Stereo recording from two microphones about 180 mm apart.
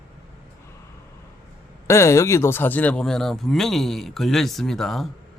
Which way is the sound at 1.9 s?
15° left (ahead or behind).